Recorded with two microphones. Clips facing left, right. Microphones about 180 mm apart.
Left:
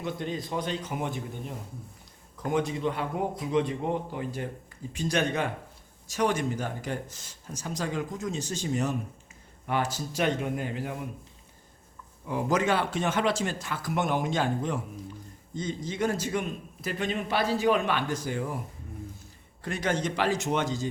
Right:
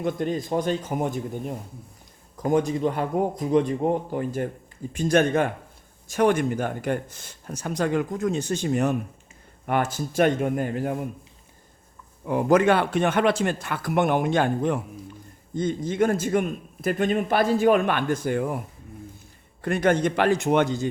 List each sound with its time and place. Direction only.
0.0 s a man's voice: 50° right (ahead or behind)
12.2 s a man's voice: 55° right (ahead or behind)
19.6 s speech: 55° right (ahead or behind)